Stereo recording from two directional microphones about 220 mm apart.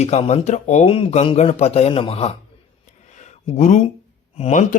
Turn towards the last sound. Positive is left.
turn(degrees=35)  # may be behind; listen again after turning